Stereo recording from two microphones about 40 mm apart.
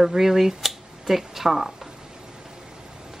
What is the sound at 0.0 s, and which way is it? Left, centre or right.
Speech, centre.